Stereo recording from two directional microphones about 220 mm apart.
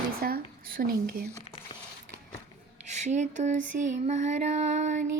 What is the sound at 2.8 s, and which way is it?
Music, 30° right (ahead or behind).